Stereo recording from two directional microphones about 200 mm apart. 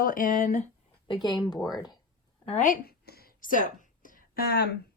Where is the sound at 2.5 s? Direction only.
40° left (ahead or behind).